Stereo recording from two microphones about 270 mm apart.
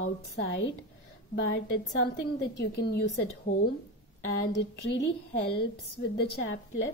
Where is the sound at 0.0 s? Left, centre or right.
Left.